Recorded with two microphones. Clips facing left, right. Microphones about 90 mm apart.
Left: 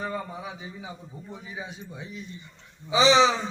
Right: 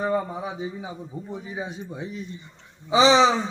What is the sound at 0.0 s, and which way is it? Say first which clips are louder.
A man's voice: right 7 dB; 25° right (ahead or behind).